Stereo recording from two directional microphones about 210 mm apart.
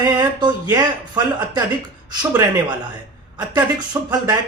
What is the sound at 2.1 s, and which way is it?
A man's voice, 15° right (ahead or behind).